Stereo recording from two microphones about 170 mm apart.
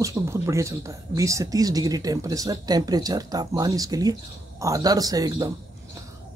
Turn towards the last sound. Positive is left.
turn(degrees=-20)  # may be behind; listen again after turning